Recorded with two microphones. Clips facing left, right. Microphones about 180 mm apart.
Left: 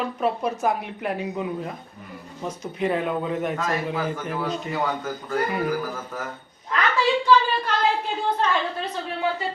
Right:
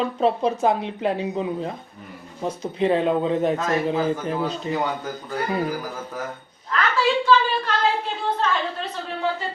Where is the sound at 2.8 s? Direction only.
25° right (ahead or behind).